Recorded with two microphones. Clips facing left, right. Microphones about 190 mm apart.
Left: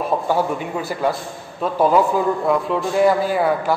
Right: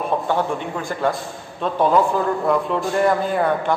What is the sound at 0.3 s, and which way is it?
A man's voice, 10° left (ahead or behind).